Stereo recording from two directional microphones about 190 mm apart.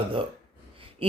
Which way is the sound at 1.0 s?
30° right (ahead or behind).